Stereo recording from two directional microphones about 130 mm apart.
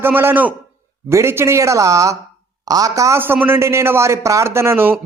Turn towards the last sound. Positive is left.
turn(degrees=-20)  # may be behind; listen again after turning